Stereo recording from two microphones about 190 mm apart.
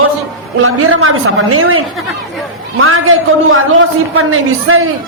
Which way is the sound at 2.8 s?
90° right.